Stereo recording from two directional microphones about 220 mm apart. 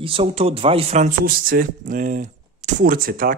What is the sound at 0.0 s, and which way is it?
Speech, 25° right (ahead or behind).